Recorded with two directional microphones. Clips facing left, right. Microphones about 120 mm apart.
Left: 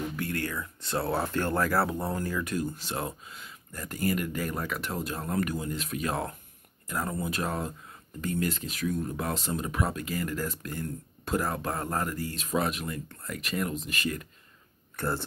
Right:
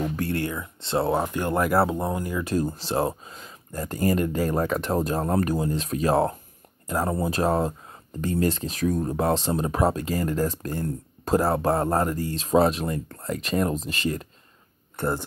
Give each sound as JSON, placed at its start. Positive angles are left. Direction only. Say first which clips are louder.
{"t": 0.1, "sound": "a sound", "louder": "right 6 dB", "side_deg": -35}
{"t": 0.4, "sound": "speech", "louder": "right 5 dB", "side_deg": -25}
{"t": 2.4, "sound": "speech", "louder": "right 6 dB", "side_deg": -35}
{"t": 15.0, "sound": "speech", "louder": "right 4 dB", "side_deg": -20}